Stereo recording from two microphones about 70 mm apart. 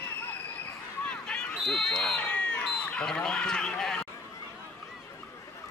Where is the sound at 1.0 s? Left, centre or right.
Centre.